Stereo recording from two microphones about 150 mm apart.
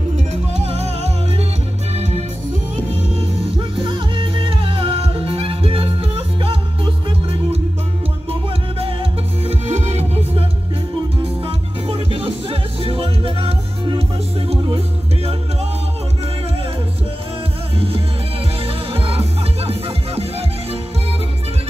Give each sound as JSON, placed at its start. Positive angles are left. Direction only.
{"t": 0.3, "sound": "music", "side_deg": -45}
{"t": 11.4, "sound": "music", "side_deg": -40}
{"t": 17.7, "sound": "music", "side_deg": -40}